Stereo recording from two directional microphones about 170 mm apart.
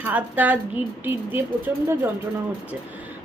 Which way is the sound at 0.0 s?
10° right (ahead or behind).